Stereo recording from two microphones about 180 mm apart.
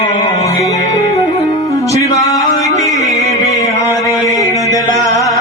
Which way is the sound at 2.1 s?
20° left (ahead or behind).